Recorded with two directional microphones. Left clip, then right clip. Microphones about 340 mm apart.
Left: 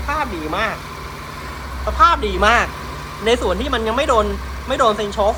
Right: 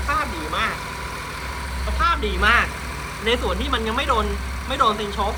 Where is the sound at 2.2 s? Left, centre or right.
Centre.